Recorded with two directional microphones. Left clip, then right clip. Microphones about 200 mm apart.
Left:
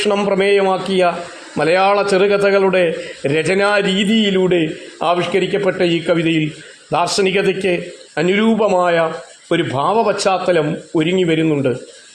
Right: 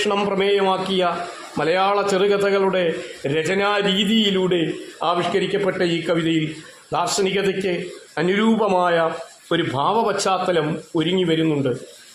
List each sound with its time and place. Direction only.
0.0 s a man's voice: 15° left (ahead or behind)